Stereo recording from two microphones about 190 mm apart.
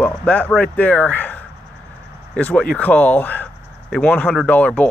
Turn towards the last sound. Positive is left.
turn(degrees=5)  # may be behind; listen again after turning